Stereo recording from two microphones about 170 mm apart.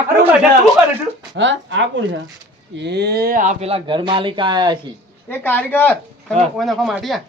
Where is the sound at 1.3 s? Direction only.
90° right; by 4.7 s 25° right (ahead or behind).